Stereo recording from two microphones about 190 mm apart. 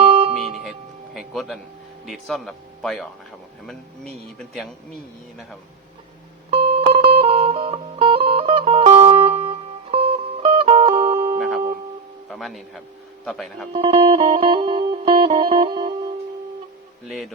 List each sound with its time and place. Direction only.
0.1 s music: 30° right (ahead or behind)
1.1 s music: centre (ahead or behind)
2.0 s speech: centre (ahead or behind)
6.5 s music: 30° right (ahead or behind)
11.3 s music: centre (ahead or behind)
12.3 s speech: centre (ahead or behind)
13.7 s music: 30° right (ahead or behind)